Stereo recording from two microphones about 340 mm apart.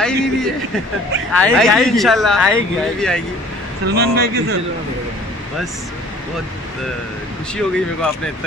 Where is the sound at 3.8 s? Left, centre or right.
Right.